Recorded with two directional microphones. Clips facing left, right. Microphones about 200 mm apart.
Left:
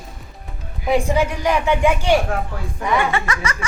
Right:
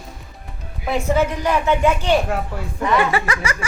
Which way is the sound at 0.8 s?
15° left (ahead or behind).